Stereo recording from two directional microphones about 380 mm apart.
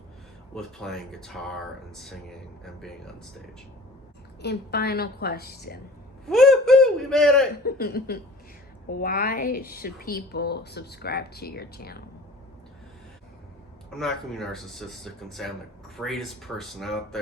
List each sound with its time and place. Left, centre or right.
0.5 s speech: centre
4.4 s a woman's voice: left
6.2 s a sound: centre
7.6 s a woman's voice: left
13.9 s speech: centre